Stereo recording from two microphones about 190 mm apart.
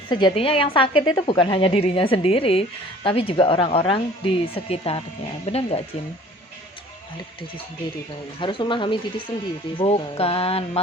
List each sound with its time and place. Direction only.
0.1 s a woman's voice: 25° left (ahead or behind)
4.5 s music: 30° left (ahead or behind)
8.4 s a woman's voice: 25° left (ahead or behind)
9.7 s music: 30° left (ahead or behind)